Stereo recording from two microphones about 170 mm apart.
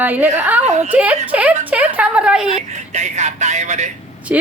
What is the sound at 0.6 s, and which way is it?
Speech, 40° right (ahead or behind).